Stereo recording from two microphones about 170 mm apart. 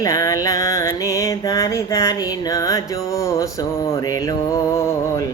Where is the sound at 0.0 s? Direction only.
20° left (ahead or behind).